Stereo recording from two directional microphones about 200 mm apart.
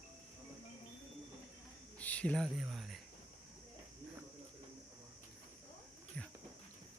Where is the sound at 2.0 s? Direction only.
5° left (ahead or behind).